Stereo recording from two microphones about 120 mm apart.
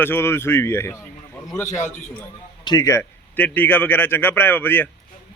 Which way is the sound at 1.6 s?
85° left.